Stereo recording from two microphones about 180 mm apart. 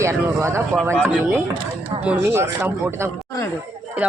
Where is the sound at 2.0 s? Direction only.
10° right (ahead or behind).